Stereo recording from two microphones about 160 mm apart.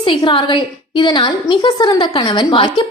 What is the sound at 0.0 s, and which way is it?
A woman's voice, 30° left (ahead or behind).